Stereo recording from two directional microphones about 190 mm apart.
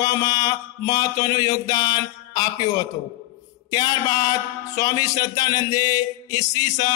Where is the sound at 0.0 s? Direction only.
20° left (ahead or behind).